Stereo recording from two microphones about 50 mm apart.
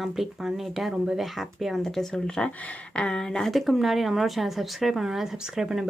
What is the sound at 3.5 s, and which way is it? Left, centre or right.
A woman's voice, centre.